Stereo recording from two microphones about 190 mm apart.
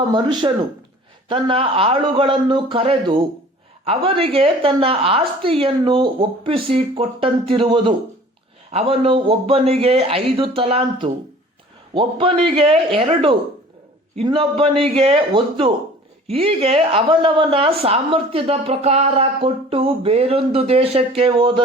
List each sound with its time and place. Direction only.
0.1 s speech: 25° right (ahead or behind)